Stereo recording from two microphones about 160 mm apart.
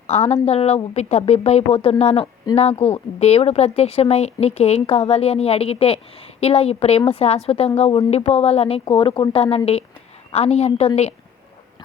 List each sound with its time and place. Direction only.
0.1 s a woman's voice: 40° left (ahead or behind)